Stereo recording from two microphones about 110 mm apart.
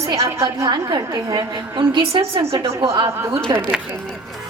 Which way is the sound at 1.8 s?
50° right (ahead or behind).